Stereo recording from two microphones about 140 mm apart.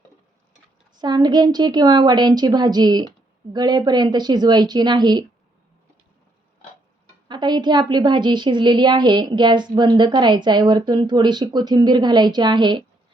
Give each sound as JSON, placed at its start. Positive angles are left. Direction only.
{"t": 0.9, "sound": "a woman's voice", "side_deg": -30}
{"t": 7.3, "sound": "a woman's voice", "side_deg": -30}